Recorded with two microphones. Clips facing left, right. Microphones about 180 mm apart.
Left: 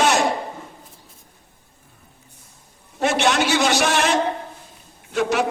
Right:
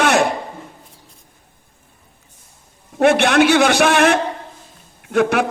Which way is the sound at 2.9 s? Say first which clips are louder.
Right 6 dB; 55° right (ahead or behind).